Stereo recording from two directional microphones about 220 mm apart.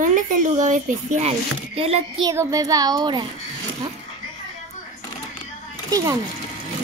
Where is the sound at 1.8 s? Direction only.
25° right (ahead or behind).